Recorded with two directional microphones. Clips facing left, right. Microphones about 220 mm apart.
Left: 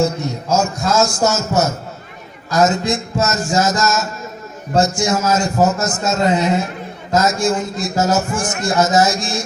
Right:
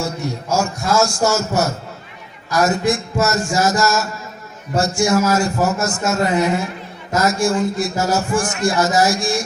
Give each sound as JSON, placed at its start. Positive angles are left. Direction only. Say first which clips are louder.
{"t": 0.0, "sound": "a man's voice", "louder": "left 5 dB", "side_deg": 20}